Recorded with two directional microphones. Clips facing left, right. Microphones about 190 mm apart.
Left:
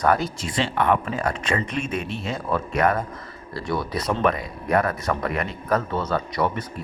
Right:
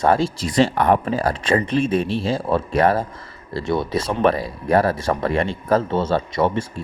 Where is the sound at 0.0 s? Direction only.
25° right (ahead or behind).